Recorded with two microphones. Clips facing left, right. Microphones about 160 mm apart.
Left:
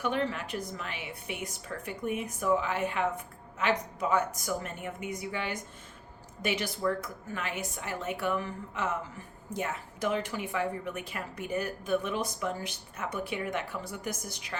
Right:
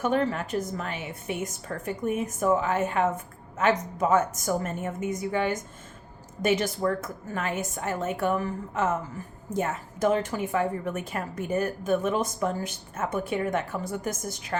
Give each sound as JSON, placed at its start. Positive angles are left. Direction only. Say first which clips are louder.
{"t": 0.0, "sound": "a woman's voice", "louder": "right 5 dB", "side_deg": -45}